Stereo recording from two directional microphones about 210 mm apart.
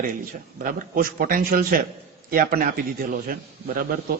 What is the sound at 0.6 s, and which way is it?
A man's voice, 40° right (ahead or behind).